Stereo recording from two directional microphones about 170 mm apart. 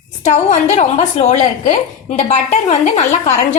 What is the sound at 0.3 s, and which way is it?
A woman's voice, 45° left (ahead or behind).